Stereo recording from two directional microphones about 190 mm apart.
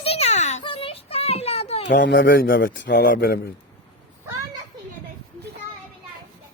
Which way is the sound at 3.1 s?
55° left (ahead or behind).